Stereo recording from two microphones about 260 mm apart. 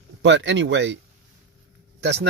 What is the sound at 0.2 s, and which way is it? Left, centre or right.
Speech, right.